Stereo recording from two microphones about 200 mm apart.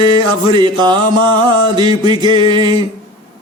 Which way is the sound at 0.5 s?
20° right (ahead or behind).